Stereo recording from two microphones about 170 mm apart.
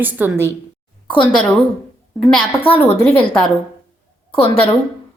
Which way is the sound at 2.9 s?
35° left (ahead or behind).